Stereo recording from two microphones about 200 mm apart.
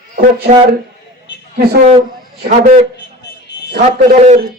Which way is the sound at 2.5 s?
35° right (ahead or behind).